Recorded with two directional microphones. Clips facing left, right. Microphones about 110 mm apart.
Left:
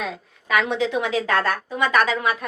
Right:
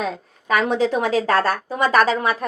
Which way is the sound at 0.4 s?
40° right (ahead or behind).